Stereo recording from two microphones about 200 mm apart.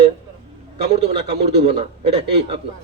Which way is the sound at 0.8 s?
30° right (ahead or behind).